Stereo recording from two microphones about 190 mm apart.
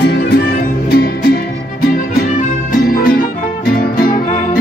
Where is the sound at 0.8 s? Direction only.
55° left (ahead or behind).